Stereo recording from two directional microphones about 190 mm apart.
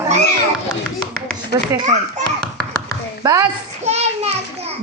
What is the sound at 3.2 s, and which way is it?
Speech, 20° right (ahead or behind).